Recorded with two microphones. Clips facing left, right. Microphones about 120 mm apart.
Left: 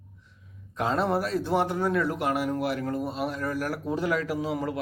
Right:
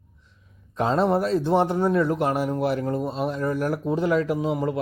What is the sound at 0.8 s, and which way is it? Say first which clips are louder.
A man's voice: right 5 dB; 30° right (ahead or behind).